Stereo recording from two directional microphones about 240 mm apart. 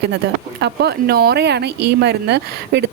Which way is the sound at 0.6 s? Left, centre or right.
Right.